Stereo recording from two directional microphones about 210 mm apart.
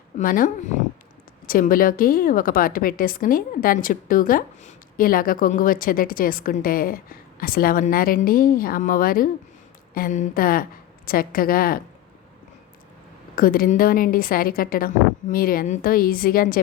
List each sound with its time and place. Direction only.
0.2 s a woman's voice: 40° left (ahead or behind)
13.3 s a woman's voice: 45° left (ahead or behind)